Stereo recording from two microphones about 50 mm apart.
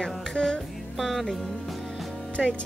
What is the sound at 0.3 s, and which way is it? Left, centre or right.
Music, centre.